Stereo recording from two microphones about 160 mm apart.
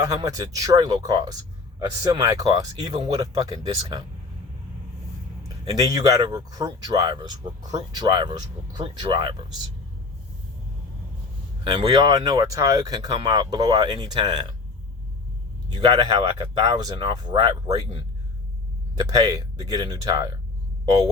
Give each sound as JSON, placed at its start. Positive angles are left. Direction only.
{"t": 0.0, "sound": "speech", "side_deg": -20}
{"t": 5.4, "sound": "speech", "side_deg": -25}
{"t": 11.6, "sound": "speech", "side_deg": -30}
{"t": 15.7, "sound": "speech", "side_deg": -25}
{"t": 18.9, "sound": "speech", "side_deg": -25}